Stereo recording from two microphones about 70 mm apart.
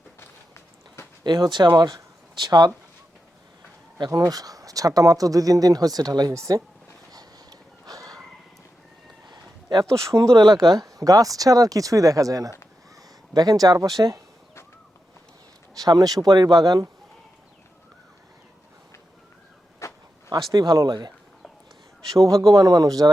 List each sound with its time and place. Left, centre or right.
0.2 s walk: left
1.2 s speech: right
2.4 s speech: right
4.2 s speech: right
6.3 s speech: right
7.1 s a sound: right
9.2 s a sound: right
9.9 s speech: right
10.3 s speech: right
13.3 s speech: right
15.7 s speech: right
19.8 s a sound: left
20.5 s speech: right
22.4 s speech: right